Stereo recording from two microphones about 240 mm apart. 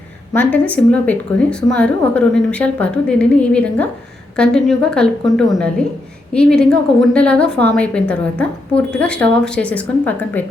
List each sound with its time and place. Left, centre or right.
0.3 s a woman's voice: centre